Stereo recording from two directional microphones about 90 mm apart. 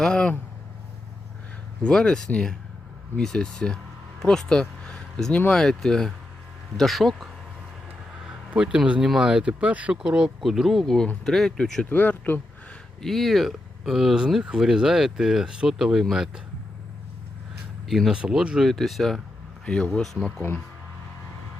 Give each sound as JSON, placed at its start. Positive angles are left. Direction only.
{"t": 0.0, "sound": "speech", "side_deg": 10}
{"t": 1.8, "sound": "speech", "side_deg": 10}
{"t": 8.4, "sound": "speech", "side_deg": -10}
{"t": 11.9, "sound": "speech", "side_deg": 20}
{"t": 13.0, "sound": "speech", "side_deg": 0}
{"t": 17.8, "sound": "speech", "side_deg": 0}
{"t": 19.6, "sound": "speech", "side_deg": 10}